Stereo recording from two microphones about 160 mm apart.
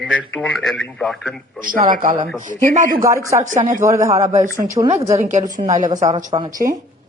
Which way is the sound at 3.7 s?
20° right (ahead or behind).